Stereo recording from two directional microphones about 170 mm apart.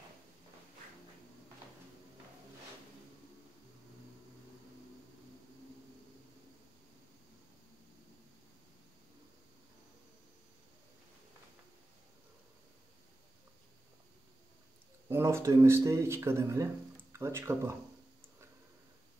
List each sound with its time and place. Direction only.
15.0 s speech: 15° right (ahead or behind)